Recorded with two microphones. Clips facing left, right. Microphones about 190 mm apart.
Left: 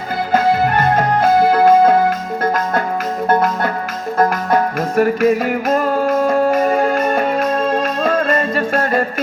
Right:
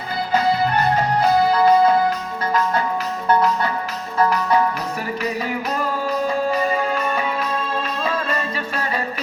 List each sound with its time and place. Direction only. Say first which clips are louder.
0.3 s music: left 4 dB; 50° left (ahead or behind)